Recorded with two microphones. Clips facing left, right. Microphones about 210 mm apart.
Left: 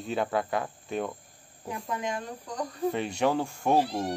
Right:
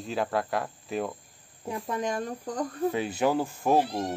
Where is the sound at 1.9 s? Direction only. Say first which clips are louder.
Right 3 dB; 40° right (ahead or behind).